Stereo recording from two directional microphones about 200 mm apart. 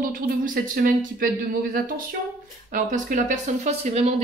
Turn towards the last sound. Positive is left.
turn(degrees=-35)  # may be behind; listen again after turning